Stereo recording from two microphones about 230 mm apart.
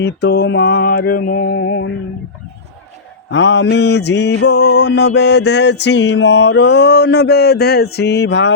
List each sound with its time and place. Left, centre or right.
0.0 s mantra: left
3.2 s mantra: left